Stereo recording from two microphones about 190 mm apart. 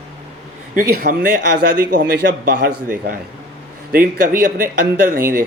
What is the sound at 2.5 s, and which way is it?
Speech, 60° right (ahead or behind).